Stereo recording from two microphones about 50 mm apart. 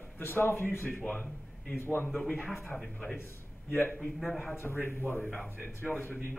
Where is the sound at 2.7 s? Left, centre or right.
Centre.